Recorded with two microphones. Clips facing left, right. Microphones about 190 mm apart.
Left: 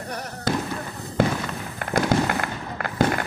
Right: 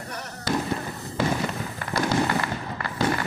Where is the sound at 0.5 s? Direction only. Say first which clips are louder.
Left 1 dB; 50° left (ahead or behind).